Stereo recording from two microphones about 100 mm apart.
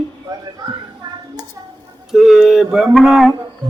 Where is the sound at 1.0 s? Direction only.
55° right (ahead or behind).